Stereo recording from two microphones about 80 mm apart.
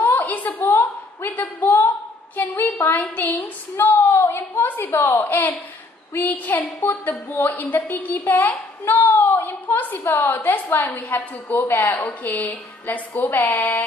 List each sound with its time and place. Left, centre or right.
0.0 s a sound: left
1.3 s a woman's voice: left
3.7 s a woman's voice: left